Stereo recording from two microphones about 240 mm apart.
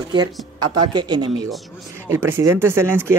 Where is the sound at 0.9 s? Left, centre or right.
Centre.